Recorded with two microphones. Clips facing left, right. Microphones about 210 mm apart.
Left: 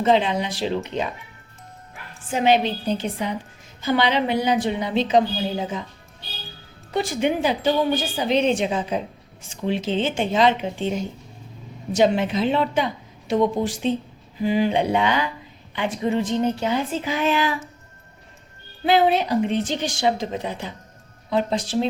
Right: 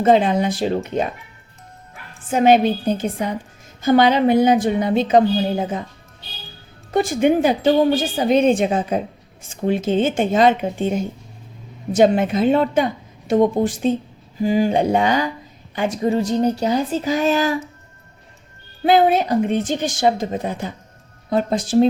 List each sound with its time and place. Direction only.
0.0 s a woman's voice: 50° right (ahead or behind)
2.3 s a woman's voice: 50° right (ahead or behind)
6.9 s a woman's voice: 50° right (ahead or behind)
18.9 s a woman's voice: 50° right (ahead or behind)